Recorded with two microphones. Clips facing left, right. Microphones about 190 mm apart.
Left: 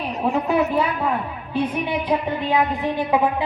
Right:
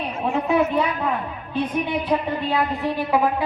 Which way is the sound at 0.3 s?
5° left (ahead or behind).